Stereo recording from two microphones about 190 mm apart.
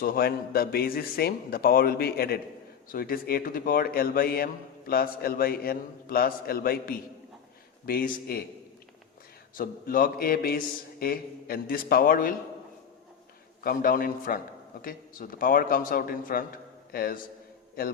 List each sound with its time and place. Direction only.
0.0 s a man's voice: 50° left (ahead or behind)
9.6 s a man's voice: 50° left (ahead or behind)
13.7 s a man's voice: 50° left (ahead or behind)